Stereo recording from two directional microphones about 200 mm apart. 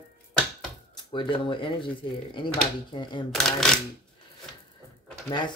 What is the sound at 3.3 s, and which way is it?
Speech, centre (ahead or behind).